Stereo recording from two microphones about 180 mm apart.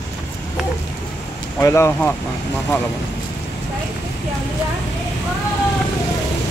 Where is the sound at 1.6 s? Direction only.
15° left (ahead or behind).